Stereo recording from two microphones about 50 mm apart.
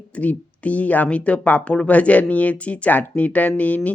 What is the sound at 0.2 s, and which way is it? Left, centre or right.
Speech, left.